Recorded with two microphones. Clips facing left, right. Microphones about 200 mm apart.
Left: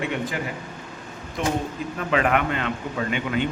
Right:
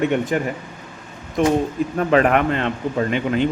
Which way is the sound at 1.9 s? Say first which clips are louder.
Right 6 dB; 45° right (ahead or behind).